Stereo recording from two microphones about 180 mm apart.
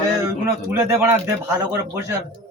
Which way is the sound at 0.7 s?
15° right (ahead or behind).